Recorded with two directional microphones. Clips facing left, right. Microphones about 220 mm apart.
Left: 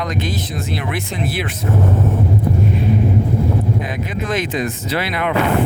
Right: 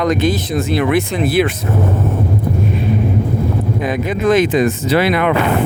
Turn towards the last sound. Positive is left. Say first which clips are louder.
# right 7 dB
turn(degrees=-60)  # may be behind; listen again after turning